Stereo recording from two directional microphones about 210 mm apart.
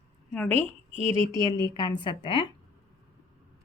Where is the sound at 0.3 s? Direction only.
5° left (ahead or behind).